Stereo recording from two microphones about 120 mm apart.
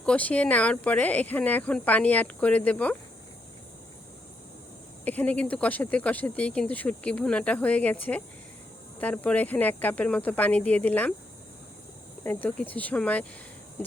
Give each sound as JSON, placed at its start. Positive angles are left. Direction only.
{"t": 0.0, "sound": "speech", "side_deg": 10}
{"t": 5.0, "sound": "speech", "side_deg": 15}
{"t": 12.2, "sound": "speech", "side_deg": 15}